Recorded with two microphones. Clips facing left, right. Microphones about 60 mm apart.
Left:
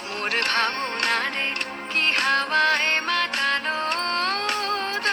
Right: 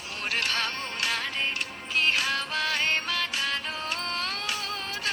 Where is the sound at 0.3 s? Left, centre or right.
Left.